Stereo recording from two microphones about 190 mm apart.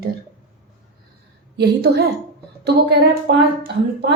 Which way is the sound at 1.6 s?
60° right (ahead or behind).